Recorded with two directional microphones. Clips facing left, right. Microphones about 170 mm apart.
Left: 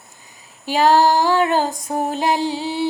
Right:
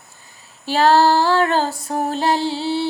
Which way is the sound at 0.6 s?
15° left (ahead or behind).